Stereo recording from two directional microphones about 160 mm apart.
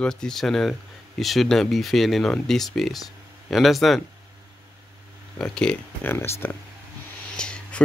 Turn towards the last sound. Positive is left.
turn(degrees=5)  # may be behind; listen again after turning